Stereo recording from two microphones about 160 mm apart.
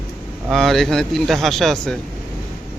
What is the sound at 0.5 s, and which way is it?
A man's voice, centre (ahead or behind).